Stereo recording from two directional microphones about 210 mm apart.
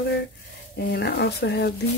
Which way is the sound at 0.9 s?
50° left (ahead or behind).